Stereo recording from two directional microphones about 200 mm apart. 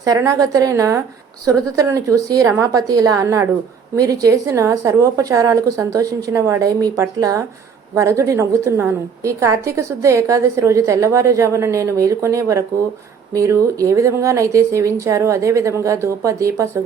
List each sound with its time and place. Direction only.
0.0 s a woman's voice: 15° right (ahead or behind)